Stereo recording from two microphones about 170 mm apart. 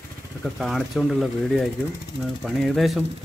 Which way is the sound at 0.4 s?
Centre (ahead or behind).